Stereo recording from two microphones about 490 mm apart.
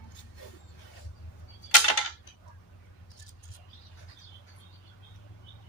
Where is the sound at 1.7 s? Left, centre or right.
Left.